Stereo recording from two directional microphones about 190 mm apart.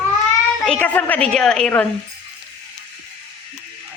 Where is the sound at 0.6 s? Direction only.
5° left (ahead or behind).